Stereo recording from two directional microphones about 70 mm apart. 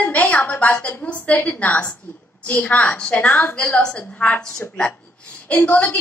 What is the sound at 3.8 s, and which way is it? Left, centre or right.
A woman's voice, centre.